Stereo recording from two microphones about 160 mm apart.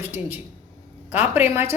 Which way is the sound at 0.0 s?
15° right (ahead or behind).